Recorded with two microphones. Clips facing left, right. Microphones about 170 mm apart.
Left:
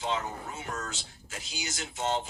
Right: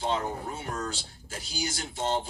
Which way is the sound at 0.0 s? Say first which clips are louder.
Right 3 dB; 30° right (ahead or behind).